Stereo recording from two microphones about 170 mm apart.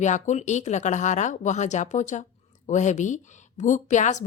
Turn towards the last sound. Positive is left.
turn(degrees=45)  # may be behind; listen again after turning